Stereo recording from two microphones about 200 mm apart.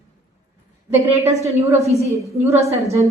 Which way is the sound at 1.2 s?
15° right (ahead or behind).